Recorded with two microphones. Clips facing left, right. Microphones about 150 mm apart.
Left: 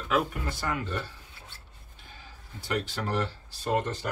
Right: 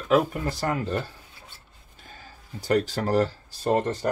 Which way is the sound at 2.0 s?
40° right (ahead or behind).